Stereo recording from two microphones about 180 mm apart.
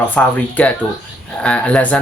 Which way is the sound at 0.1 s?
10° left (ahead or behind).